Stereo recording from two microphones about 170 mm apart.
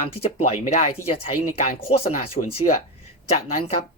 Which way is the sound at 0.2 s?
35° left (ahead or behind).